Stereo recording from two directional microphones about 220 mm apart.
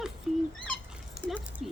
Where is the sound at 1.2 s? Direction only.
5° left (ahead or behind).